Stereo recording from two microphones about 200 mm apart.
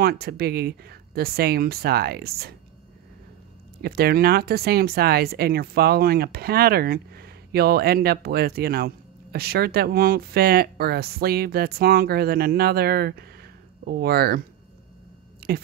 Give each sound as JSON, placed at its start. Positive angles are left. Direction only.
{"t": 0.0, "sound": "speech", "side_deg": -50}
{"t": 3.8, "sound": "speech", "side_deg": -50}
{"t": 15.4, "sound": "a sound", "side_deg": -50}